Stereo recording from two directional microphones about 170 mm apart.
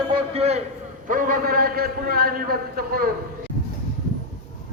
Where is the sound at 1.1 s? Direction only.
55° right (ahead or behind).